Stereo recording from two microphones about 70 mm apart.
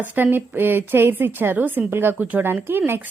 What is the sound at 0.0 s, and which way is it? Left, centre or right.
A woman's voice, right.